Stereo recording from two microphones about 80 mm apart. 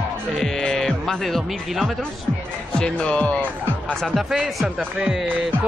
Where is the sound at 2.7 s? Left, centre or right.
Centre.